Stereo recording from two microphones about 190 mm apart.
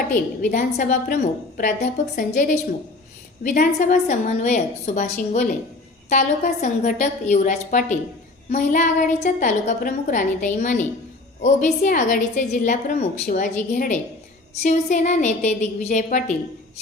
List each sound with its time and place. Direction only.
0.1 s a woman's voice: 45° left (ahead or behind)